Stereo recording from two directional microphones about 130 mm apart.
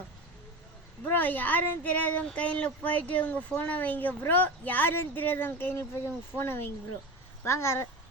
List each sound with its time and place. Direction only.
1.0 s speech: 15° left (ahead or behind)